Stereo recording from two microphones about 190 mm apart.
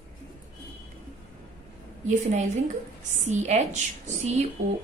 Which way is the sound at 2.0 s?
40° right (ahead or behind).